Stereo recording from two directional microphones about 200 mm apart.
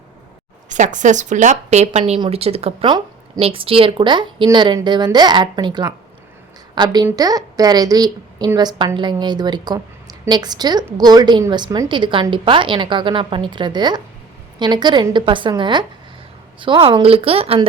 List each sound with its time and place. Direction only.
0.7 s a woman's voice: 40° right (ahead or behind)